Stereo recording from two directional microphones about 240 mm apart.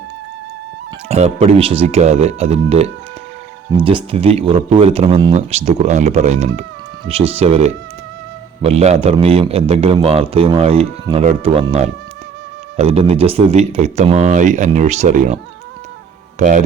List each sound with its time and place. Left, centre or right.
1.0 s speech: right
16.4 s speech: right